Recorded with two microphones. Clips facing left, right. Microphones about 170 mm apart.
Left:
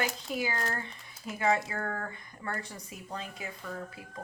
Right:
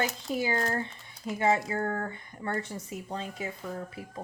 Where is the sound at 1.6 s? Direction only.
25° right (ahead or behind).